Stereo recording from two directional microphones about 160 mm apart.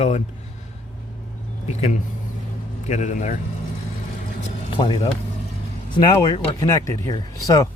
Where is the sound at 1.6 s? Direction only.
40° left (ahead or behind).